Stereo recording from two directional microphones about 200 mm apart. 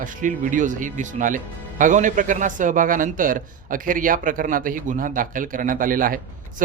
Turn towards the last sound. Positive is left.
turn(degrees=-45)  # may be behind; listen again after turning